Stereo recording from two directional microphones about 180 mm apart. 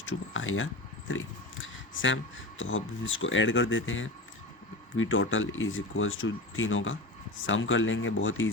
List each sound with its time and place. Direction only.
0.0 s speech: 90° left